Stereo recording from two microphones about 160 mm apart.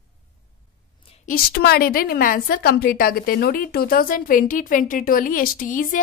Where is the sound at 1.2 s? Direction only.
70° left (ahead or behind).